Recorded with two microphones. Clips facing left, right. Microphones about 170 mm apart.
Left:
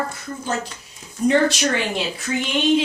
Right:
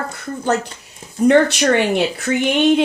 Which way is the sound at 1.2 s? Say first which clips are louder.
Right 5 dB; 60° right (ahead or behind).